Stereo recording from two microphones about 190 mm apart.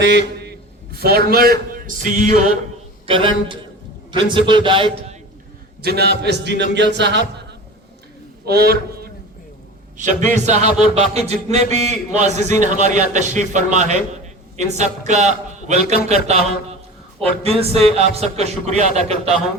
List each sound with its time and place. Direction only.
0.0 s a man's voice: 65° right (ahead or behind); by 2.5 s 40° right (ahead or behind)
3.1 s a man's voice: 30° right (ahead or behind)
5.8 s a man's voice: 60° right (ahead or behind)
8.4 s a man's voice: 60° right (ahead or behind)
10.0 s a man's voice: 40° right (ahead or behind)